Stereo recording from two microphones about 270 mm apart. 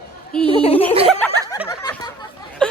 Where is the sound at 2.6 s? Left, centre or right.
Centre.